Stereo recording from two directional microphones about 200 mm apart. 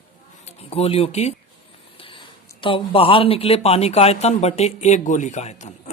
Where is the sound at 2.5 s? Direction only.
25° left (ahead or behind).